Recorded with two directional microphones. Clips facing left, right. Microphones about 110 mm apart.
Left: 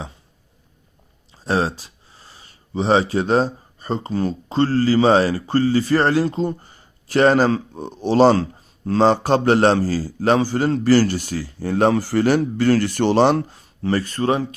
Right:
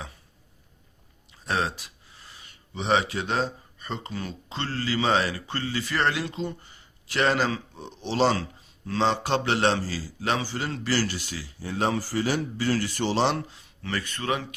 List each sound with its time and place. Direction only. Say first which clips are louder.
1.3 s a man's voice: left 7 dB; 30° left (ahead or behind)